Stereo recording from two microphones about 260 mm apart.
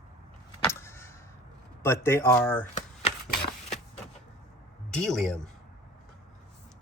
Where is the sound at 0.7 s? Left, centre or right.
Centre.